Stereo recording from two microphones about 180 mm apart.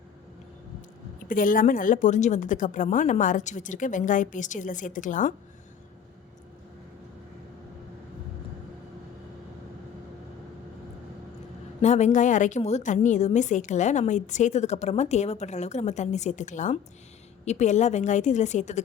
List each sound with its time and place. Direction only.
1.3 s a woman's voice: 50° left (ahead or behind)
11.8 s a woman's voice: 40° left (ahead or behind)